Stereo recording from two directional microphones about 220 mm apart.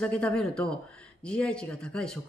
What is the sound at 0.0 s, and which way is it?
A woman's voice, 5° left (ahead or behind).